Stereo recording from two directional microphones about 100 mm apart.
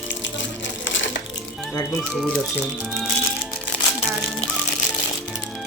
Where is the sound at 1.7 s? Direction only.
35° left (ahead or behind).